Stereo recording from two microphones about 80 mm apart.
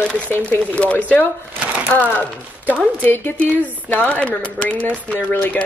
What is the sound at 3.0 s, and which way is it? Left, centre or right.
Speech, left.